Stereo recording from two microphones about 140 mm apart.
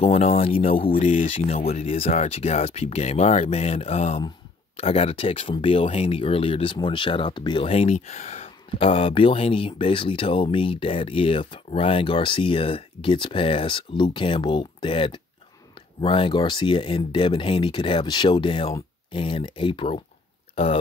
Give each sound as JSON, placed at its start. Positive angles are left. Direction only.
{"t": 0.0, "sound": "speech", "side_deg": 45}
{"t": 1.0, "sound": "speech", "side_deg": 60}